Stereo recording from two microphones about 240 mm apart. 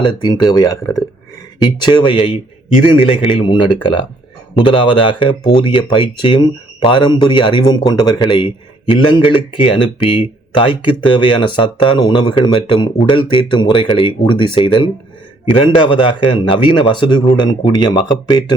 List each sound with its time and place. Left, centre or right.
0.0 s speech: centre